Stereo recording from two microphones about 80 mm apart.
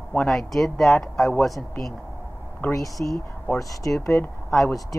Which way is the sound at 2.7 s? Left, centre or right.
Left.